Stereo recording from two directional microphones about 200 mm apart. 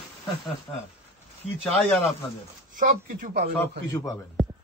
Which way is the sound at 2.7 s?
40° right (ahead or behind).